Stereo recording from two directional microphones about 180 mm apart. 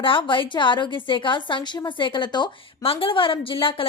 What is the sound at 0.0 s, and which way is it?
A woman's voice, 30° left (ahead or behind).